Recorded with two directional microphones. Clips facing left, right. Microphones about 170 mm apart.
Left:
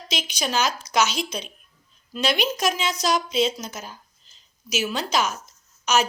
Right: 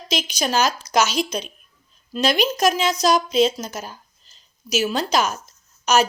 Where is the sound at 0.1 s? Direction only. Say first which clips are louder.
Right 4 dB; 40° right (ahead or behind).